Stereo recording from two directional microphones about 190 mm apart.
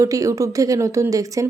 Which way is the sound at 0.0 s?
15° right (ahead or behind).